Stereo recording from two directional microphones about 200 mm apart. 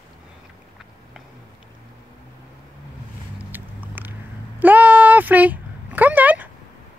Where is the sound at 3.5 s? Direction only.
10° right (ahead or behind).